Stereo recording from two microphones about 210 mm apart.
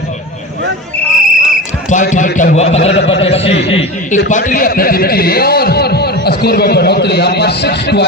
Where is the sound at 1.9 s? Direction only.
35° left (ahead or behind).